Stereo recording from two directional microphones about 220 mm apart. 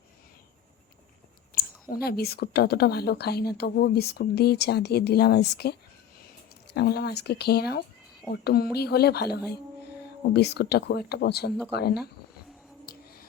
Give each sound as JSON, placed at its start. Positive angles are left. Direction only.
{"t": 1.5, "sound": "speech", "side_deg": 45}
{"t": 6.7, "sound": "speech", "side_deg": 45}
{"t": 12.8, "sound": "a sound", "side_deg": 45}